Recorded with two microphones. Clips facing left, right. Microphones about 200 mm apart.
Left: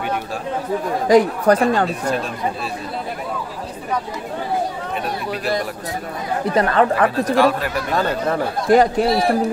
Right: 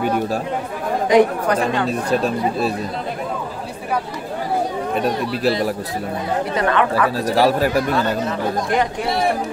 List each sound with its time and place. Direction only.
1.0 s speech: 40° left (ahead or behind)
1.9 s speech: 40° right (ahead or behind)
6.5 s speech: 35° left (ahead or behind)
7.3 s speech: 35° right (ahead or behind)
7.9 s speech: 40° left (ahead or behind)